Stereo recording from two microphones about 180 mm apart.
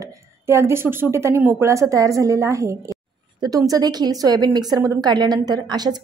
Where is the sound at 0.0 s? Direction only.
15° right (ahead or behind).